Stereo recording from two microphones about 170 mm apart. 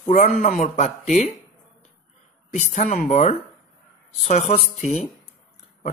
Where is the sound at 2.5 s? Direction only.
40° left (ahead or behind).